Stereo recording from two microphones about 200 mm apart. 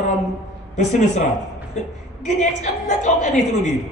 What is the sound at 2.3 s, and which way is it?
A woman's voice, 35° left (ahead or behind).